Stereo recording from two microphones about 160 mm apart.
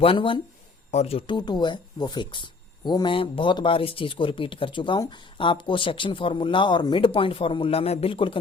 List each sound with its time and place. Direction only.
0.0 s speech: 35° left (ahead or behind)